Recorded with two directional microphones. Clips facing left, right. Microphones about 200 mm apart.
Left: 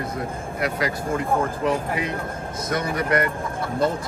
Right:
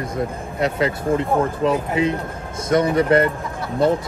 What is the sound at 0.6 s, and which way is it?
Speech, 25° right (ahead or behind).